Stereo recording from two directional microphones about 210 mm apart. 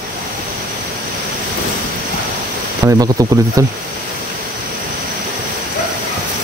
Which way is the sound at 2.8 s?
15° right (ahead or behind).